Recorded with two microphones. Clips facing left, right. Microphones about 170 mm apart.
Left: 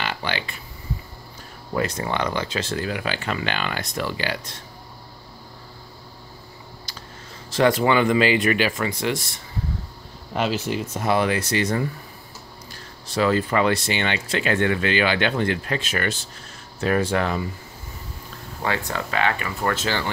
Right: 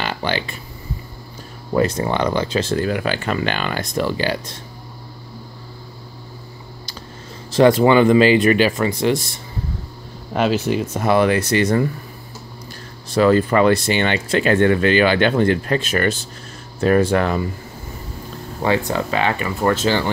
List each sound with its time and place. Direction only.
0.0 s a sound: 35° right (ahead or behind)
1.7 s speech: 30° right (ahead or behind)
2.8 s speech: 50° right (ahead or behind)
7.5 s speech: 30° right (ahead or behind)
10.3 s speech: 60° right (ahead or behind)
13.1 s speech: 50° right (ahead or behind)
18.6 s speech: 25° right (ahead or behind)